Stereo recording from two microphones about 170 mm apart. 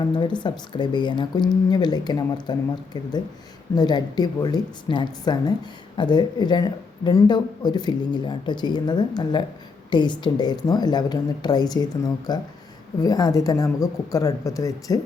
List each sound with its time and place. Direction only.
0.2 s speech: 25° left (ahead or behind)